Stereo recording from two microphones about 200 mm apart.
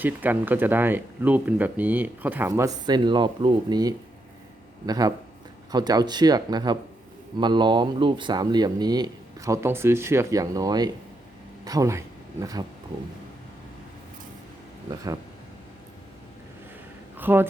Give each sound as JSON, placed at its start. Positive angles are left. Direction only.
{"t": 0.0, "sound": "speech", "side_deg": -10}
{"t": 14.8, "sound": "speech", "side_deg": -20}
{"t": 17.2, "sound": "speech", "side_deg": -10}